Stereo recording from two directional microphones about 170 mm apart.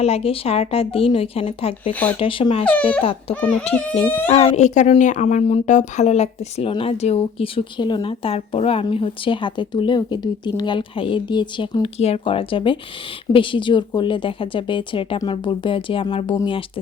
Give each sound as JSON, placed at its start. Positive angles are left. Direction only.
{"t": 0.0, "sound": "speech", "side_deg": 35}
{"t": 1.9, "sound": "speech", "side_deg": 10}
{"t": 2.1, "sound": "a woman's voice", "side_deg": 30}